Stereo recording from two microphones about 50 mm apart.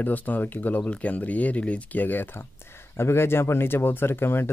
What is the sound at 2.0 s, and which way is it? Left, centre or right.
Speech, left.